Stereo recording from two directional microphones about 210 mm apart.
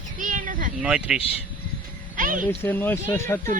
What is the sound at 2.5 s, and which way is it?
Speech, 10° left (ahead or behind).